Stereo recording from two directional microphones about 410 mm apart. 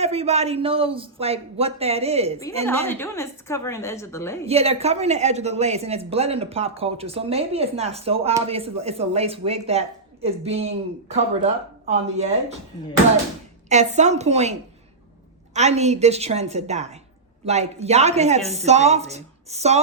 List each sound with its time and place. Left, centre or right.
0.0 s a woman's voice: centre
2.6 s a woman's voice: centre
4.4 s a woman's voice: centre
13.7 s a woman's voice: centre
15.5 s a woman's voice: centre